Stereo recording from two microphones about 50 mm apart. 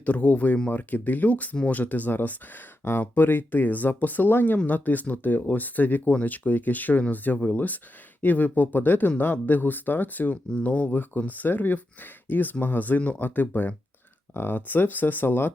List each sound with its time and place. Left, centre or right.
0.0 s speech: left